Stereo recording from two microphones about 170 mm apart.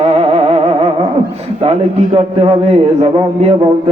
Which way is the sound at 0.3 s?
35° right (ahead or behind).